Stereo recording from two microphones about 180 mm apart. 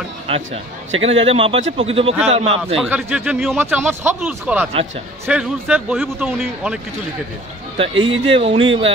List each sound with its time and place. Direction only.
0.3 s a man's voice: 35° right (ahead or behind)
2.8 s speech: 5° right (ahead or behind)
7.7 s a man's voice: 30° right (ahead or behind)